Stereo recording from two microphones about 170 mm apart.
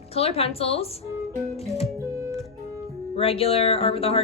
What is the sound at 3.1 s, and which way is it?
Speech, 35° left (ahead or behind).